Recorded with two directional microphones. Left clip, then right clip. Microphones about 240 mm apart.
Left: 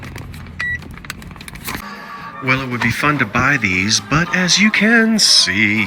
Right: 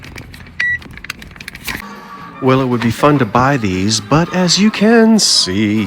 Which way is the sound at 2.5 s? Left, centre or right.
Centre.